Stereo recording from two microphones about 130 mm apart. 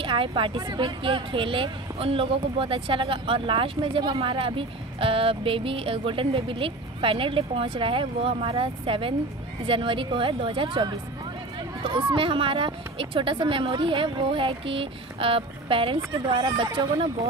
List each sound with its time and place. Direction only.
0.0 s a woman's voice: 40° right (ahead or behind)